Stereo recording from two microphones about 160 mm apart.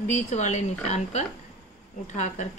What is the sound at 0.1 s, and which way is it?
A woman's voice, 50° left (ahead or behind).